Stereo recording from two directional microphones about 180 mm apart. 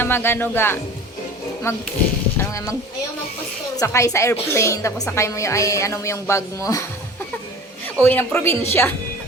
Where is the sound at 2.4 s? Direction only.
15° left (ahead or behind).